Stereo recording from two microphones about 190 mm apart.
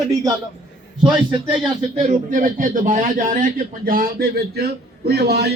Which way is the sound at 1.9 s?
40° right (ahead or behind).